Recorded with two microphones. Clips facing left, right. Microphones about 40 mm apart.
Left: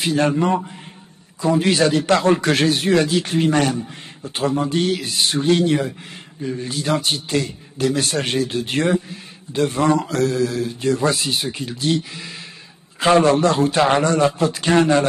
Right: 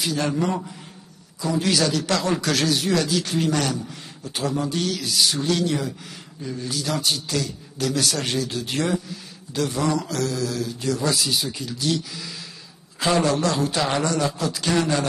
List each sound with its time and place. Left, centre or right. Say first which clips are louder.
0.0 s a man's voice: left 5 dB; left